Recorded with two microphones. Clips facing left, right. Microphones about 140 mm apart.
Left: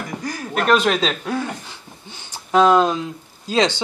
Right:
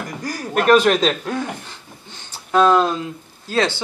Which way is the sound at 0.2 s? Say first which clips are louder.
Right 1 dB; 45° right (ahead or behind).